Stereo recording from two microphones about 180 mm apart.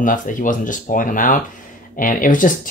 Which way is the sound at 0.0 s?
45° left (ahead or behind).